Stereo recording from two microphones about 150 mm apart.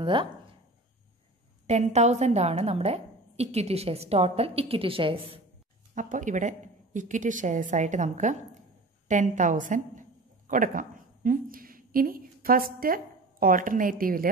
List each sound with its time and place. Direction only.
0.0 s speech: 35° right (ahead or behind)
1.7 s a woman's voice: 50° right (ahead or behind)
5.9 s a woman's voice: 60° right (ahead or behind)